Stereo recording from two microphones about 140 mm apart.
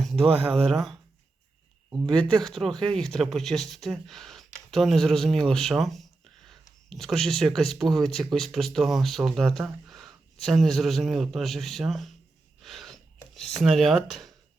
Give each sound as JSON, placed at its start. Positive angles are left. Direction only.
{"t": 0.2, "sound": "speech", "side_deg": -45}
{"t": 0.5, "sound": "speech", "side_deg": 0}
{"t": 2.0, "sound": "speech", "side_deg": 5}
{"t": 12.6, "sound": "a sound", "side_deg": 0}